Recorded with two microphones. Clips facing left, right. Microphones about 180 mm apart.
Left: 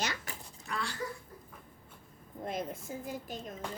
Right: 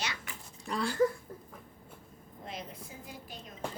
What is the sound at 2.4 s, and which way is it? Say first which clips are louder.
Speech: left 7 dB; 50° left (ahead or behind).